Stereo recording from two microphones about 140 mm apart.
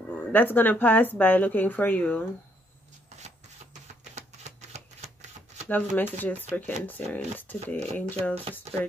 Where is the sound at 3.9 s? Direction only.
55° right (ahead or behind).